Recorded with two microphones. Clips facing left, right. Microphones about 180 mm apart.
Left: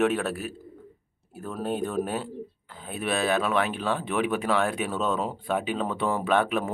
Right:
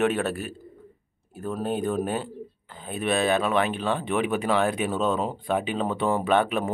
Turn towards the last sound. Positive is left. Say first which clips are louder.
# right 1 dB
turn(degrees=0)  # may be behind; listen again after turning